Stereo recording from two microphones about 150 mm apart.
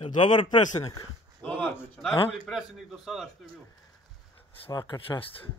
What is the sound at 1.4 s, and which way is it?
Speech, 10° left (ahead or behind).